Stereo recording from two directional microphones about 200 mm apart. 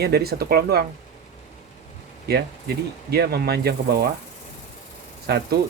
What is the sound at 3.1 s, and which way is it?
Speech, 50° right (ahead or behind).